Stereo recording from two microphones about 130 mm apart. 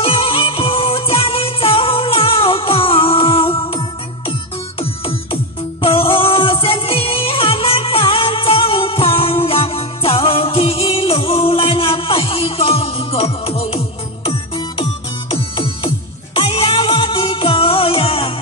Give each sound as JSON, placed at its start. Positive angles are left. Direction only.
{"t": 0.0, "sound": "music", "side_deg": 45}